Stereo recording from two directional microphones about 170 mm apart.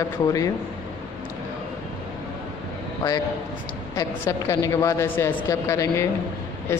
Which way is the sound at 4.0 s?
15° left (ahead or behind).